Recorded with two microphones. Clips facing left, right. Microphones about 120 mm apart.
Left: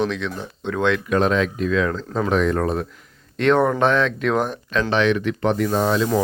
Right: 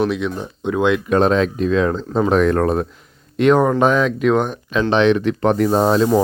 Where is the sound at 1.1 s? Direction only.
35° right (ahead or behind).